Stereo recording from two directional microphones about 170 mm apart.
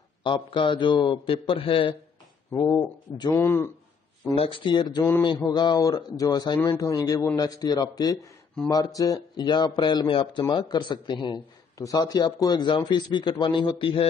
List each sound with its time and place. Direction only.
0.2 s a man's voice: 30° left (ahead or behind)
2.5 s a man's voice: 20° left (ahead or behind)
4.4 s a man's voice: 30° left (ahead or behind)